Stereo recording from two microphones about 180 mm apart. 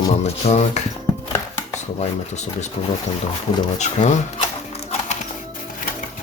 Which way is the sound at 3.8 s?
40° left (ahead or behind).